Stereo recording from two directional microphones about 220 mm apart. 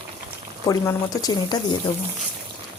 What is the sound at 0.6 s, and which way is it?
Speech, 15° left (ahead or behind).